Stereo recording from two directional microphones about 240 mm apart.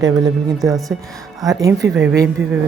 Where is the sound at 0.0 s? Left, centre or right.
Centre.